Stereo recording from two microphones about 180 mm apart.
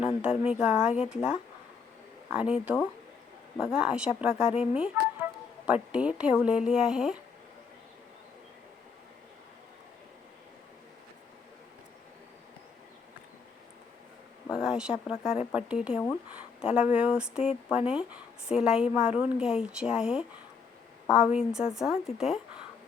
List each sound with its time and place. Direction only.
0.2 s a woman's voice: 5° right (ahead or behind)
4.4 s speech: 35° left (ahead or behind)
5.6 s a woman's voice: 5° right (ahead or behind)
14.5 s a woman's voice: 5° right (ahead or behind)